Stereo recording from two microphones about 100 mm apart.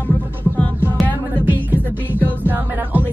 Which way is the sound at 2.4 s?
20° right (ahead or behind).